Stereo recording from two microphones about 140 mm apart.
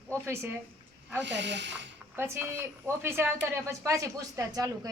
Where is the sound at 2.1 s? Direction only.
15° right (ahead or behind).